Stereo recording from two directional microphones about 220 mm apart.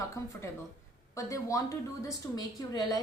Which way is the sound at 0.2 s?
15° left (ahead or behind).